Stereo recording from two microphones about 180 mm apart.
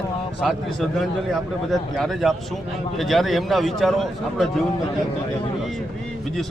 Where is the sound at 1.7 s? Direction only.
Centre (ahead or behind).